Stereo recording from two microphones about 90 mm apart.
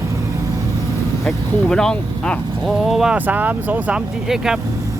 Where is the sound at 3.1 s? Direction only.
20° right (ahead or behind).